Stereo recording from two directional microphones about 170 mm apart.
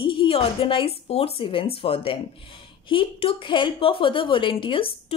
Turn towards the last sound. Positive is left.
turn(degrees=30)  # may be behind; listen again after turning